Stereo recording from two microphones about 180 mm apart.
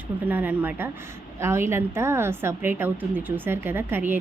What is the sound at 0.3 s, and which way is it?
A woman's voice, 10° right (ahead or behind).